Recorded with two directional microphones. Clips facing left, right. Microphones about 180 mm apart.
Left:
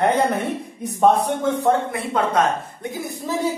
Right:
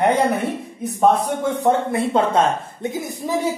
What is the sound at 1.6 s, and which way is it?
Speech, 25° right (ahead or behind).